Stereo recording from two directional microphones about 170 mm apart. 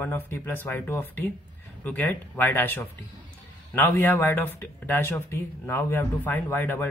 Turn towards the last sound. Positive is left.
turn(degrees=10)  # may be behind; listen again after turning